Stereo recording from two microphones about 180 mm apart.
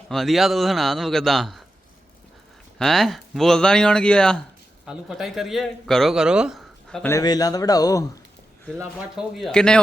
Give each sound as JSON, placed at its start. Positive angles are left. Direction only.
{"t": 0.1, "sound": "speech", "side_deg": 0}
{"t": 2.7, "sound": "speech", "side_deg": 0}
{"t": 7.1, "sound": "a man's voice", "side_deg": 20}
{"t": 8.8, "sound": "speech", "side_deg": -5}